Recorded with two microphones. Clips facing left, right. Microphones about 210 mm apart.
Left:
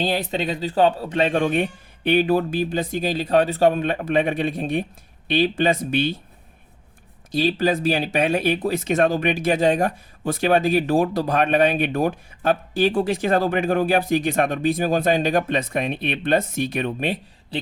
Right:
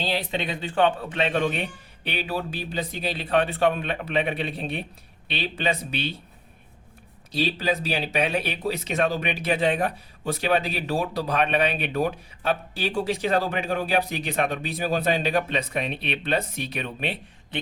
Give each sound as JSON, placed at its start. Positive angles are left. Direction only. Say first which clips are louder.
{"t": 0.0, "sound": "speech", "louder": "left 4 dB", "side_deg": 45}
{"t": 7.3, "sound": "speech", "louder": "left 5 dB", "side_deg": 50}